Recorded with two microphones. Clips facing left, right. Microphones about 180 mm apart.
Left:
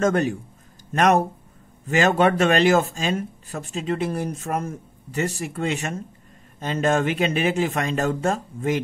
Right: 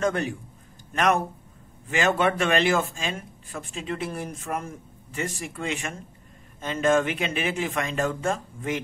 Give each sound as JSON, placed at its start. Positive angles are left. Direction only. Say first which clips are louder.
{"t": 0.0, "sound": "a man's voice", "louder": "left 5 dB", "side_deg": 45}